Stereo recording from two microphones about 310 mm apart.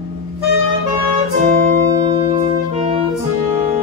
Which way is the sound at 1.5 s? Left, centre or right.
Right.